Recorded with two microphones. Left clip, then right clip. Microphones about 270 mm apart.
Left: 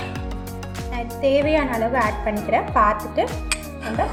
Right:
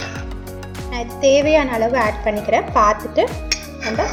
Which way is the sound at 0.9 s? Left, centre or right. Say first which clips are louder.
Right 5 dB; right.